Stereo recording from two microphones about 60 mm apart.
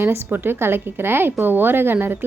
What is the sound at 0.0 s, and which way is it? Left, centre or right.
Speech, right.